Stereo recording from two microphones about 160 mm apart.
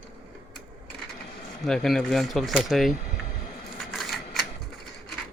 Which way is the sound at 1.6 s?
Centre (ahead or behind).